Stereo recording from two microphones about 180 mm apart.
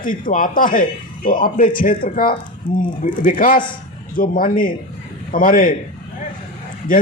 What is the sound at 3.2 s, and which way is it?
Speech, 50° left (ahead or behind).